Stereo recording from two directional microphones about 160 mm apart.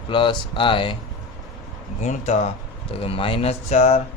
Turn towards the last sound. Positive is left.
turn(degrees=45)  # may be behind; listen again after turning